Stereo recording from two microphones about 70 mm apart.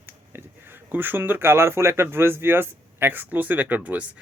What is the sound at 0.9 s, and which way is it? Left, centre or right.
Speech, right.